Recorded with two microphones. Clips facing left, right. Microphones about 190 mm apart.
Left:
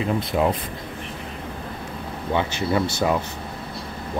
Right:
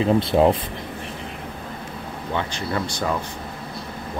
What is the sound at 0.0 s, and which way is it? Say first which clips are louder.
Speech: right 5 dB; 30° right (ahead or behind).